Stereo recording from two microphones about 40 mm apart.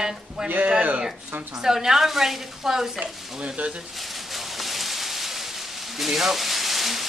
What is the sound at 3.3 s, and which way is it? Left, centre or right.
Speech, right.